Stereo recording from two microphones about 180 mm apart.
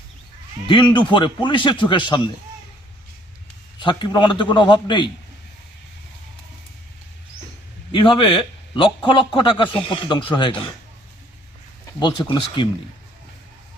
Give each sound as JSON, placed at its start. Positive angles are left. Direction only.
{"t": 0.7, "sound": "a man's voice", "side_deg": 25}
{"t": 3.8, "sound": "a man's voice", "side_deg": 25}
{"t": 7.9, "sound": "a man's voice", "side_deg": 30}
{"t": 11.9, "sound": "a man's voice", "side_deg": 25}